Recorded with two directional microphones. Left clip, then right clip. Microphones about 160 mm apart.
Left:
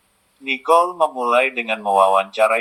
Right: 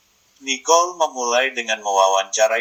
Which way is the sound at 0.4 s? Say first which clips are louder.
Left 1 dB; 10° left (ahead or behind).